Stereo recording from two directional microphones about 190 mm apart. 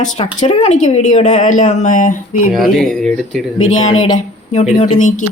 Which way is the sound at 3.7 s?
35° left (ahead or behind).